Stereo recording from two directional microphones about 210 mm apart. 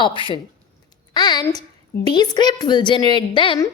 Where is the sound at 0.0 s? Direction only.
25° left (ahead or behind).